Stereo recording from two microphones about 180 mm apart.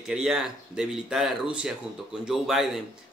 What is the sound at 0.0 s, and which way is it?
Speech, 5° right (ahead or behind).